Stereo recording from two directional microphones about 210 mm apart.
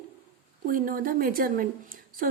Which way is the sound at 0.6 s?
40° right (ahead or behind).